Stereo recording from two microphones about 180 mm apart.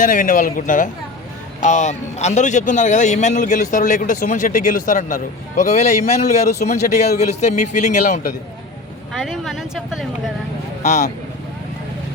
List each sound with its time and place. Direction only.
0.0 s a man's voice: 45° left (ahead or behind)
9.2 s speech: centre (ahead or behind)
10.8 s a man's voice: 40° left (ahead or behind)